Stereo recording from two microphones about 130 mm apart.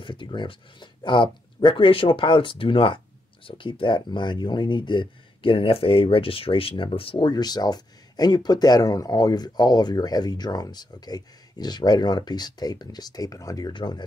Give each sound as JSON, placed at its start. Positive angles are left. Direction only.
{"t": 0.0, "sound": "speech", "side_deg": 40}